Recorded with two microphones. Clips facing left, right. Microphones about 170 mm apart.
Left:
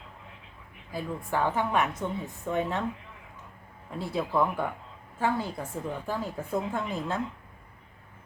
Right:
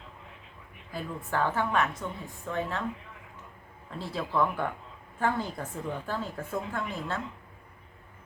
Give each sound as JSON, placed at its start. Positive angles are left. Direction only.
{"t": 0.9, "sound": "a woman's voice", "side_deg": 15}
{"t": 3.9, "sound": "speech", "side_deg": 10}